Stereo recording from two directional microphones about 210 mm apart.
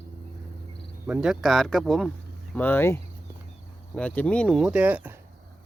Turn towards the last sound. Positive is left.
turn(degrees=-5)  # may be behind; listen again after turning